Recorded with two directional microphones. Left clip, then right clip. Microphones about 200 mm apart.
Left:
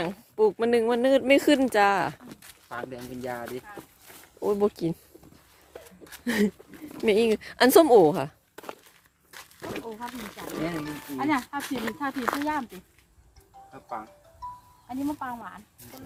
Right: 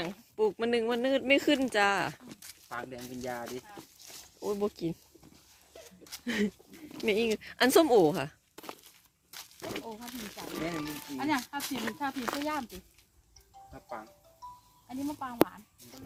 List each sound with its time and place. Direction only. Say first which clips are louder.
0.0 s speech: left 7 dB; 15° left (ahead or behind)
2.6 s speech: left 4 dB; 25° left (ahead or behind)
3.0 s speech: left 4 dB; centre (ahead or behind)
4.4 s speech: left 8 dB; 30° left (ahead or behind)
6.2 s speech: left 6 dB; 20° left (ahead or behind); by 8.8 s 5° left (ahead or behind)
9.3 s dog: left 3 dB; 10° right (ahead or behind)
10.1 s speech: left 4 dB; 15° left (ahead or behind)
10.5 s speech: left 4 dB; 5° left (ahead or behind)
11.2 s speech: left 5 dB; 15° right (ahead or behind)
12.1 s speech: left 6 dB; 10° left (ahead or behind)
14.8 s speech: left 6 dB; 10° right (ahead or behind)